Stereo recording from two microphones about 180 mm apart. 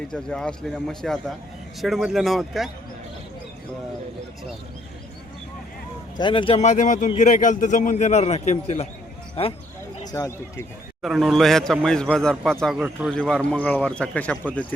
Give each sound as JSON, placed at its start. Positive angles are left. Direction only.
{"t": 0.1, "sound": "a man's voice", "side_deg": 5}
{"t": 6.1, "sound": "a man's voice", "side_deg": 25}
{"t": 10.0, "sound": "a man's voice", "side_deg": 20}
{"t": 11.0, "sound": "a man's voice", "side_deg": 0}